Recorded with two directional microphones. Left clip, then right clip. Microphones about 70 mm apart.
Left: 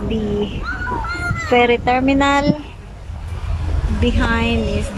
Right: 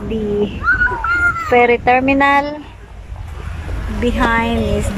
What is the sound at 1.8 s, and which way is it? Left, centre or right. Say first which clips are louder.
Speech: right 3 dB; centre.